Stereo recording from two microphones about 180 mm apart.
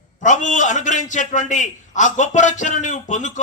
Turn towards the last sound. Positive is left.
turn(degrees=45)  # may be behind; listen again after turning